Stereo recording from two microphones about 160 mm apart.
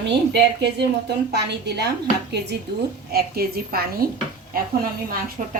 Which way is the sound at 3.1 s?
75° right (ahead or behind).